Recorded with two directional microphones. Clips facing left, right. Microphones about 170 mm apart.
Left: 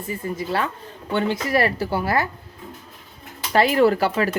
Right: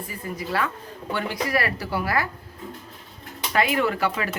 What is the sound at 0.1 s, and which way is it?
A woman's voice, 25° left (ahead or behind).